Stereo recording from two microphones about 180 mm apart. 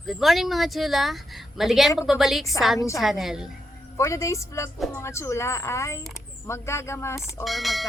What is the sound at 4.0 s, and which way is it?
A woman's voice, 15° left (ahead or behind).